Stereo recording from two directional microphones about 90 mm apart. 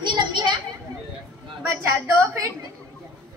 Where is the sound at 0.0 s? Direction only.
60° right (ahead or behind).